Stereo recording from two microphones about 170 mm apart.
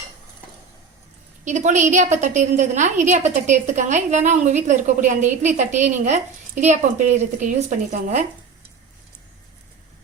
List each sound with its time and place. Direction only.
1.5 s a woman's voice: 45° right (ahead or behind)